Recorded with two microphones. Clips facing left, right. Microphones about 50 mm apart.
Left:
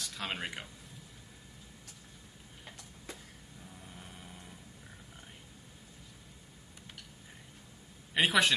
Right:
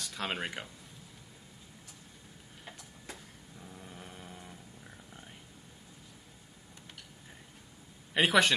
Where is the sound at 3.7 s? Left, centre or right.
Centre.